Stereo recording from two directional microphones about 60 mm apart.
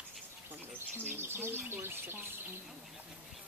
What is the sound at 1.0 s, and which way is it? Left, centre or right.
Speech, right.